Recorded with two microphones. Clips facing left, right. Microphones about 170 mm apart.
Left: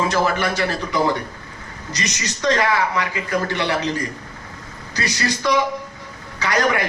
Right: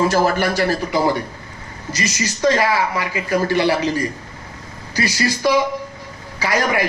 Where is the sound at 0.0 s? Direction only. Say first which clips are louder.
Right 3 dB; 35° right (ahead or behind).